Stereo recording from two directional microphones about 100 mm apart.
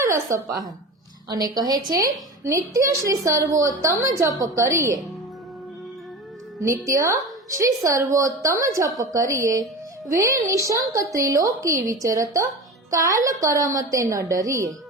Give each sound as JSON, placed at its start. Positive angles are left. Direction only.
{"t": 0.1, "sound": "a woman's voice", "side_deg": -35}
{"t": 6.6, "sound": "a woman's voice", "side_deg": -30}